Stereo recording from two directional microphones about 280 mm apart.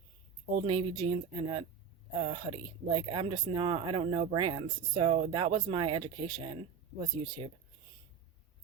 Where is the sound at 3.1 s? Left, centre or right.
Centre.